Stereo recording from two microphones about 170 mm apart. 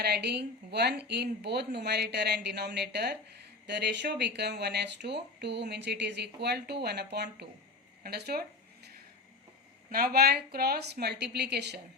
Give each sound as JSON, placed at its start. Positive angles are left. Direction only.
{"t": 0.0, "sound": "speech", "side_deg": -75}
{"t": 8.0, "sound": "a sound", "side_deg": -70}
{"t": 9.9, "sound": "speech", "side_deg": -60}